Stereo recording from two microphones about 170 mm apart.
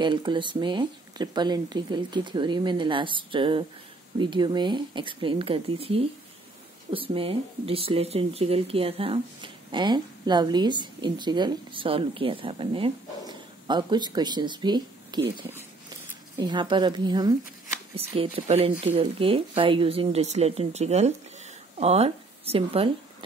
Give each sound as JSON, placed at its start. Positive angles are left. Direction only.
{"t": 0.0, "sound": "a woman's voice", "side_deg": -25}